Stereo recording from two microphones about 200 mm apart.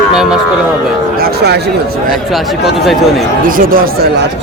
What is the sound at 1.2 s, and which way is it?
Speech, 55° right (ahead or behind).